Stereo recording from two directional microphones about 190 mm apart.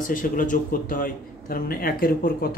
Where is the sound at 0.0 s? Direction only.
45° left (ahead or behind).